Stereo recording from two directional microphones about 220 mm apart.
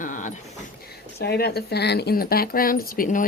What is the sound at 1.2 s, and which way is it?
Speech, 45° left (ahead or behind).